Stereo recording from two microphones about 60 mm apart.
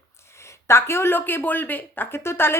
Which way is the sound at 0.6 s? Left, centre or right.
Left.